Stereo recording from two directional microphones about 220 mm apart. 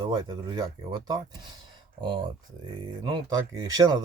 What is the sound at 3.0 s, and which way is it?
Speech, 20° right (ahead or behind).